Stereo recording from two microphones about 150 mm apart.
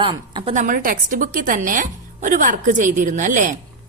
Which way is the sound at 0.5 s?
60° right (ahead or behind).